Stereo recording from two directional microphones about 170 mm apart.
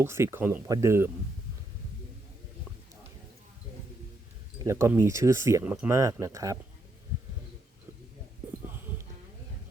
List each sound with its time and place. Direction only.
0.0 s speech: 15° right (ahead or behind)
4.6 s speech: 15° right (ahead or behind)